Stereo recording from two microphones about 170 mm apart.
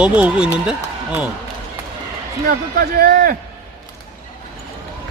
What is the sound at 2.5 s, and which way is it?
Speech, 60° right (ahead or behind).